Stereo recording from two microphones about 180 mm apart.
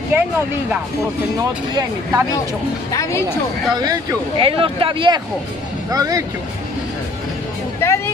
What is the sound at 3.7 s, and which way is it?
Speech, 20° right (ahead or behind).